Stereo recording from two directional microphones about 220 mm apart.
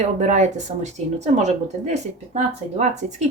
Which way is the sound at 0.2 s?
35° right (ahead or behind).